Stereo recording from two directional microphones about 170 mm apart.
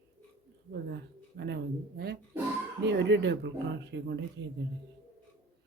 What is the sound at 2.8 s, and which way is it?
Speech, 90° right.